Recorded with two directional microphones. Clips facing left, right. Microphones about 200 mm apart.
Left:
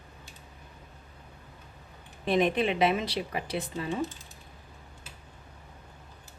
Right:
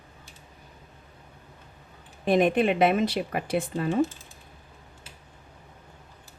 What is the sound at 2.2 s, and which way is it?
A woman's voice, 50° right (ahead or behind).